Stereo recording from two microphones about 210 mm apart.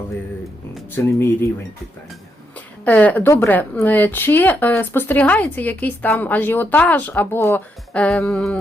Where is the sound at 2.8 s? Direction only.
10° left (ahead or behind).